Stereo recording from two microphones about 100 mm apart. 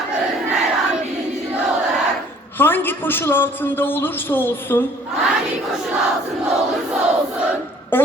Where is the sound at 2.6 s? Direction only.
20° left (ahead or behind).